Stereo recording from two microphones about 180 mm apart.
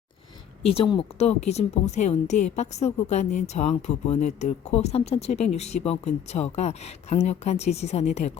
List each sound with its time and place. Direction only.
0.7 s a woman's voice: 30° left (ahead or behind)